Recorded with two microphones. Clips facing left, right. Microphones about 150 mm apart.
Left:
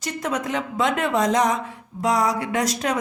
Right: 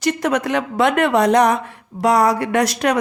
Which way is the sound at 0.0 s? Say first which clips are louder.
Right 7 dB; 75° right (ahead or behind).